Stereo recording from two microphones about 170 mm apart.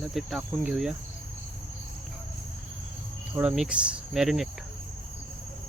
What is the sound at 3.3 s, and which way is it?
Cricket, 5° right (ahead or behind).